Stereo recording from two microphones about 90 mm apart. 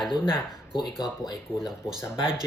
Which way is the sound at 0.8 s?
50° left (ahead or behind).